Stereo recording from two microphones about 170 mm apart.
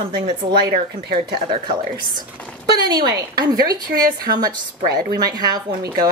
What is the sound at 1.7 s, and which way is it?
A woman's voice, 25° right (ahead or behind).